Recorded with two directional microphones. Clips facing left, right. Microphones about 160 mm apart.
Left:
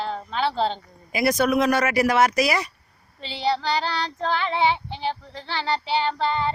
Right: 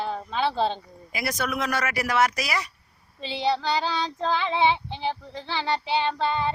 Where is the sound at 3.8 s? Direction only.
15° right (ahead or behind).